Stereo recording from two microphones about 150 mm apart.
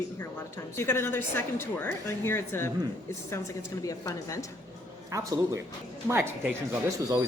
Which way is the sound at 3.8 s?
20° left (ahead or behind).